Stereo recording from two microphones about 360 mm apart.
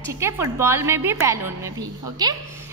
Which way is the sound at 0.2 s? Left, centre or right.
Centre.